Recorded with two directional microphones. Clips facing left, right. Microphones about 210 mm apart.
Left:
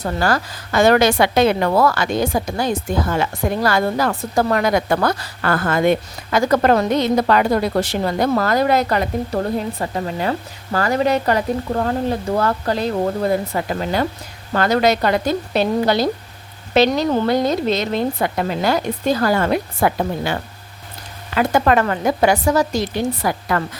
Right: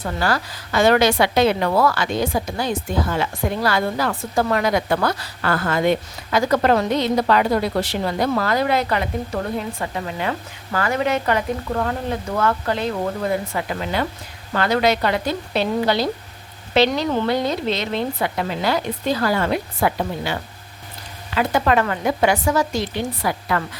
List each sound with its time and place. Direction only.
0.0 s a woman's voice: 45° left (ahead or behind)